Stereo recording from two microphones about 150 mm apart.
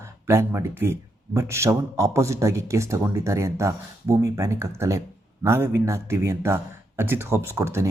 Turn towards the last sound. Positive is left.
turn(degrees=-20)  # may be behind; listen again after turning